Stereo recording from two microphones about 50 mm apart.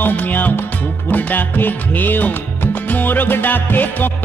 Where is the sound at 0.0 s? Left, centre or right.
Left.